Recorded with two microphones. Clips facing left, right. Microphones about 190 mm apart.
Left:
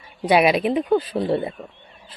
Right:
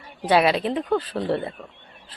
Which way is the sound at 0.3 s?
15° left (ahead or behind).